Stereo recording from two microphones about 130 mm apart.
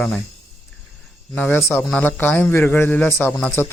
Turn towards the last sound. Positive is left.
turn(degrees=10)  # may be behind; listen again after turning